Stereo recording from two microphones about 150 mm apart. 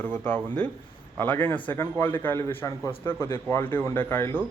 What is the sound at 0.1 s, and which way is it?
A man's voice, 10° left (ahead or behind).